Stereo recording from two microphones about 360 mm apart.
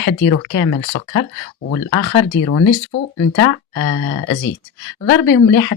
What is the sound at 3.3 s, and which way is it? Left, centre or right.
Speech, left.